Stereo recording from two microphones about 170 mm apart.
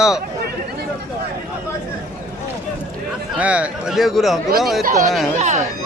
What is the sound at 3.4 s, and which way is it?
A man's voice, 10° right (ahead or behind).